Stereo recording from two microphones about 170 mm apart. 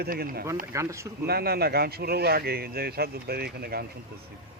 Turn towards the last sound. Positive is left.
turn(degrees=-65)  # may be behind; listen again after turning